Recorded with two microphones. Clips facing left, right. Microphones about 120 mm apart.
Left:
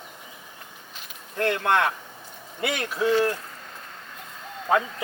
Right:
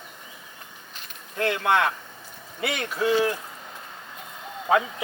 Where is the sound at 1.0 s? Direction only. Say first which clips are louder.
Left 1 dB; centre (ahead or behind).